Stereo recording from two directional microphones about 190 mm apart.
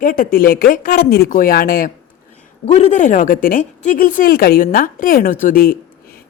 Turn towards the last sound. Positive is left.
turn(degrees=50)  # may be behind; listen again after turning